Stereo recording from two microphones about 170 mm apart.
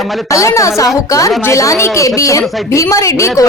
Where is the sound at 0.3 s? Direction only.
20° left (ahead or behind).